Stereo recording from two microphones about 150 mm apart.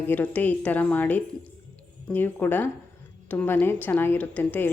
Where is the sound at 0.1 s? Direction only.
10° left (ahead or behind).